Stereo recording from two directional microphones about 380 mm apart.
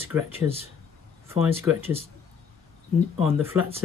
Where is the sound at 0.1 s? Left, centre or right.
Centre.